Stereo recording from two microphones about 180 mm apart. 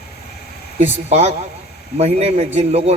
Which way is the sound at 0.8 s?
35° right (ahead or behind).